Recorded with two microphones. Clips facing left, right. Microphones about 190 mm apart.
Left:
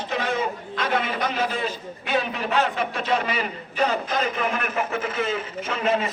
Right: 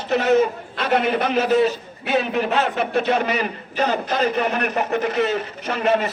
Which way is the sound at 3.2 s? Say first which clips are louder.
Right 4 dB; 45° right (ahead or behind).